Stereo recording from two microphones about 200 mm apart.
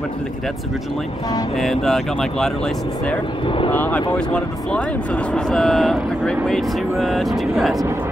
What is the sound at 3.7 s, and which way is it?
Speech, 10° left (ahead or behind).